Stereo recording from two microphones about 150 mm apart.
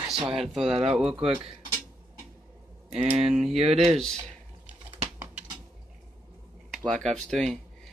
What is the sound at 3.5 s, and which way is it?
Speech, 40° right (ahead or behind).